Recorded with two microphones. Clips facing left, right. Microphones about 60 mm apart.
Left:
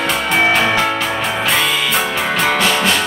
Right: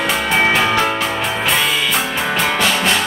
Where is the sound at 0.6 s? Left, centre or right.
Centre.